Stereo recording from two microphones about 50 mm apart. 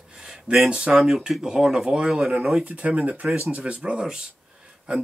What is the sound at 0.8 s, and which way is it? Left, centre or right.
Speech, centre.